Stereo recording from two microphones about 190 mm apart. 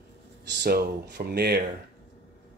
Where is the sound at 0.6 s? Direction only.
55° right (ahead or behind).